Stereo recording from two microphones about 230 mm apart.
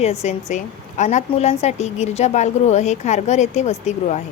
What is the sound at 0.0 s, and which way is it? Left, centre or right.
A woman's voice, left.